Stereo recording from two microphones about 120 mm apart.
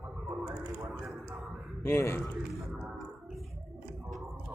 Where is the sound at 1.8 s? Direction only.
20° left (ahead or behind).